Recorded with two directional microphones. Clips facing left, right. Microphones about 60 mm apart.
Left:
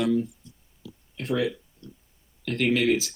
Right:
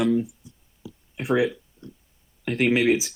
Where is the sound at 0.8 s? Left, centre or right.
Centre.